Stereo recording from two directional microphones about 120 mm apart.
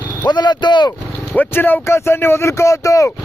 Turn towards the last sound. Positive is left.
turn(degrees=25)  # may be behind; listen again after turning